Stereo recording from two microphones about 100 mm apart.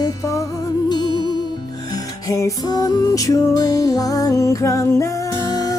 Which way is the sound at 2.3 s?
35° left (ahead or behind).